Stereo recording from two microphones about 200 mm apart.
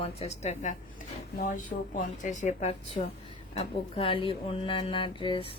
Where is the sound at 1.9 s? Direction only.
40° left (ahead or behind).